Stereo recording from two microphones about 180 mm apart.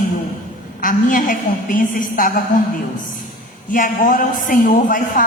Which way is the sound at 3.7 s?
45° left (ahead or behind).